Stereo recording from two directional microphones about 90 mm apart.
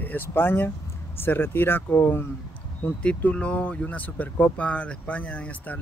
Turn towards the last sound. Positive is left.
turn(degrees=15)  # may be behind; listen again after turning